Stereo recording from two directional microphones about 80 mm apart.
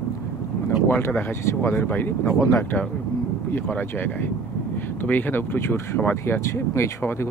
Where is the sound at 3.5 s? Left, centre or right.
Left.